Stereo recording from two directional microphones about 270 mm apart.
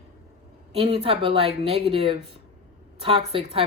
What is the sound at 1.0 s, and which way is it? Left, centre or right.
Speech, centre.